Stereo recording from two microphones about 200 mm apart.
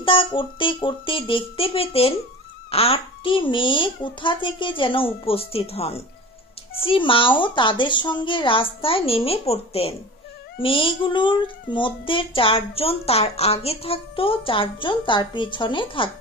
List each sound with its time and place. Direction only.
0.0 s a child's voice: 25° left (ahead or behind)